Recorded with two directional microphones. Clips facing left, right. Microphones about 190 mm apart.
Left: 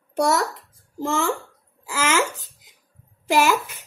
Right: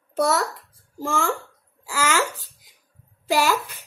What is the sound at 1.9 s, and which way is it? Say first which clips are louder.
Hiccup: left 1 dB; 15° left (ahead or behind).